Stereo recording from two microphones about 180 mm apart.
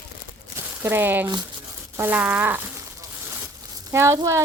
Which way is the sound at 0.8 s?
10° right (ahead or behind).